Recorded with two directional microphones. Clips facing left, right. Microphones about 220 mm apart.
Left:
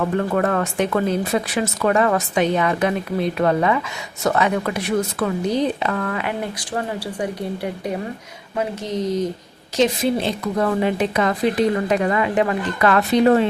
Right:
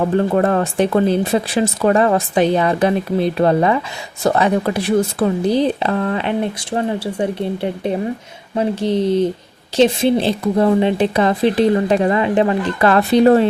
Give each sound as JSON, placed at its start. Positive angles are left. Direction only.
{"t": 0.0, "sound": "speech", "side_deg": -30}